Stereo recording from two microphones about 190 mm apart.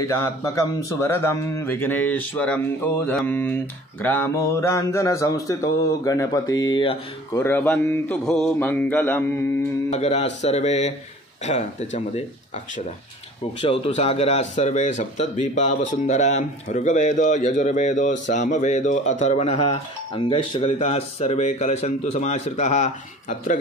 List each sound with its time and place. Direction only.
0.0 s speech: 15° left (ahead or behind)
6.6 s mantra: 25° left (ahead or behind)
7.4 s speech: 10° left (ahead or behind)
9.8 s speech: 35° left (ahead or behind)
13.6 s speech: 30° left (ahead or behind)